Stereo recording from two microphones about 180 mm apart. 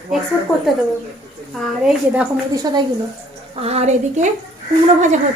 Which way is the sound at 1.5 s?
Centre (ahead or behind).